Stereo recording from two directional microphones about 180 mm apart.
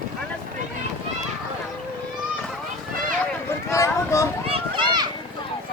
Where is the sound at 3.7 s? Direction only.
15° left (ahead or behind).